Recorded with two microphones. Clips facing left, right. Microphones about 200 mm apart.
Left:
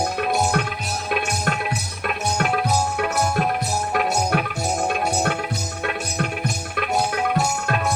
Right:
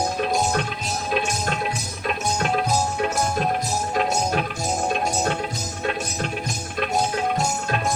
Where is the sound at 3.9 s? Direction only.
65° left (ahead or behind).